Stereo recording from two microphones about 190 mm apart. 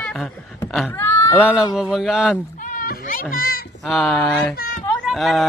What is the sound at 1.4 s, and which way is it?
Speech, 5° right (ahead or behind).